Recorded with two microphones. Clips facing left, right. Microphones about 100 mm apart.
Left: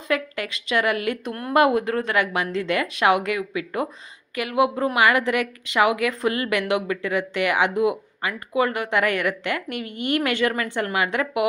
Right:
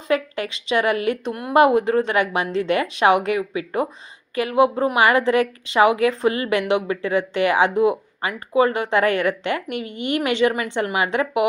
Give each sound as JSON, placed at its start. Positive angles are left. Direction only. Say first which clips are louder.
{"t": 0.1, "sound": "a woman's voice", "louder": "right 3 dB", "side_deg": -30}
{"t": 1.3, "sound": "a woman's voice", "louder": "right 3 dB", "side_deg": -15}